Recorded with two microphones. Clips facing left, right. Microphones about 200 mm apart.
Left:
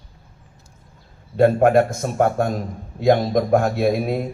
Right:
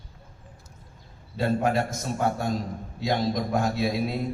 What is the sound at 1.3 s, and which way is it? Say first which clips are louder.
A man's voice: left 10 dB; 55° left (ahead or behind).